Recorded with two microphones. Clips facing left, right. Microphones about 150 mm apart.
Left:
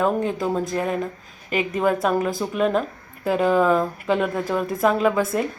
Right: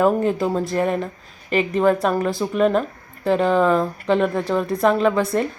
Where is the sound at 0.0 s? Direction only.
Centre (ahead or behind).